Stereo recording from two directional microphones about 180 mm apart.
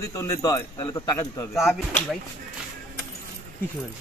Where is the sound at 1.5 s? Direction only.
Centre (ahead or behind).